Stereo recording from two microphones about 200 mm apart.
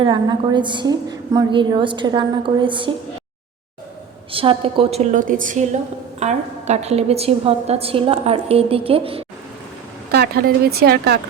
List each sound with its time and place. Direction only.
0.0 s a woman's voice: 25° right (ahead or behind)
4.3 s a woman's voice: 25° right (ahead or behind)
10.1 s speech: 50° right (ahead or behind)